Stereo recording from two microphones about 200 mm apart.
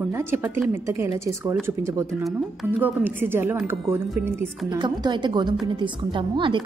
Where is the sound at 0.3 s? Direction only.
10° right (ahead or behind).